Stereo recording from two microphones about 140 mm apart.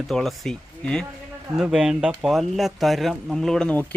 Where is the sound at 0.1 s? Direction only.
Centre (ahead or behind).